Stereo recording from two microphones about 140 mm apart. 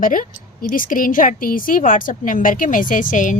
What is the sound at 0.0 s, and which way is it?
Speech, 80° left.